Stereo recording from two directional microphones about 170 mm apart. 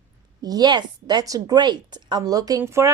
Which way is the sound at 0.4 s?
25° right (ahead or behind).